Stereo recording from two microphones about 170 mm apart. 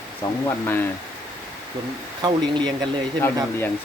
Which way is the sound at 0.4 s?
10° left (ahead or behind).